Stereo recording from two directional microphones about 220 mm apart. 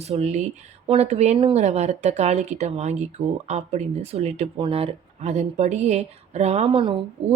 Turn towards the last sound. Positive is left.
turn(degrees=-30)  # may be behind; listen again after turning